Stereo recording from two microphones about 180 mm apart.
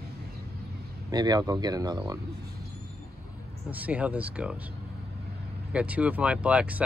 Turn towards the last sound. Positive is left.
turn(degrees=-5)  # may be behind; listen again after turning